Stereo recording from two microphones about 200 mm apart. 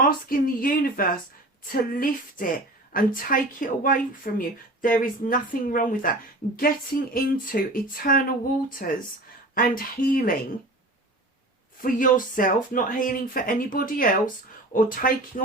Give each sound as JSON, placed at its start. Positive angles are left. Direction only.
{"t": 0.0, "sound": "speech", "side_deg": 45}
{"t": 11.8, "sound": "speech", "side_deg": 45}